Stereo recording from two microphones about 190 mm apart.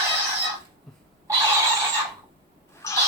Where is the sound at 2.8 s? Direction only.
15° left (ahead or behind).